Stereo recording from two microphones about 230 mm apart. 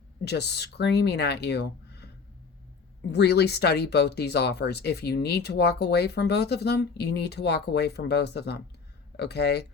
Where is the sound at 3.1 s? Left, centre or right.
Left.